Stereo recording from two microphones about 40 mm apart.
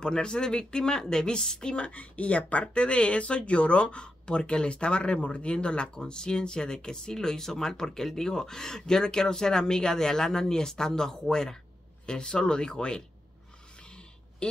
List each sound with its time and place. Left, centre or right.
0.0 s speech: left
1.9 s speech: left
13.8 s a sound: left